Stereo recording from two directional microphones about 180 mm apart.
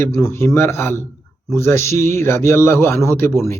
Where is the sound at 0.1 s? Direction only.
15° left (ahead or behind).